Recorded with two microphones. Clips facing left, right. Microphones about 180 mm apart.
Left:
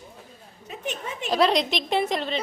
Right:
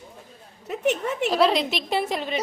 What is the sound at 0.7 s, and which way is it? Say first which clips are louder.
Speech: right 9 dB; 70° right (ahead or behind).